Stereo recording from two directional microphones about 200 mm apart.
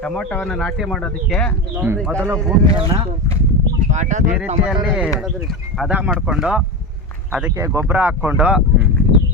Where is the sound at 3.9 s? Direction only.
35° right (ahead or behind).